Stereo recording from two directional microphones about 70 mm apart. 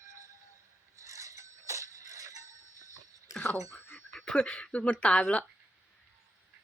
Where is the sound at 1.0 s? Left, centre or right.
Right.